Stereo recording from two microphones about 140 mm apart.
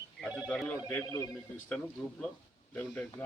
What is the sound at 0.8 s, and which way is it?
Speech, 15° left (ahead or behind).